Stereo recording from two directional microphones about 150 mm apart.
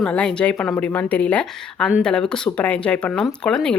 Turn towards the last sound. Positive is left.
turn(degrees=5)  # may be behind; listen again after turning